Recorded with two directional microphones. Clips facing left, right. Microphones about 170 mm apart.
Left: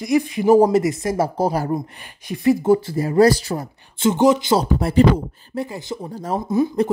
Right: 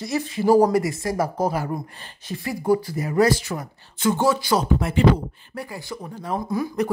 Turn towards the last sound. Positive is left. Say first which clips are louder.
# left 6 dB
turn(degrees=25)  # may be behind; listen again after turning